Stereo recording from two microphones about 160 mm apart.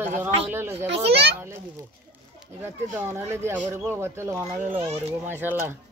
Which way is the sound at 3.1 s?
15° right (ahead or behind).